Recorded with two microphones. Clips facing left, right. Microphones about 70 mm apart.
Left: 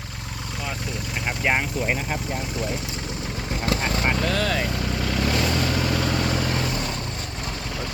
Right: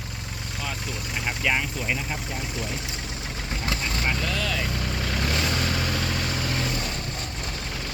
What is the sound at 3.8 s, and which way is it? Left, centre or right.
Vehicle, left.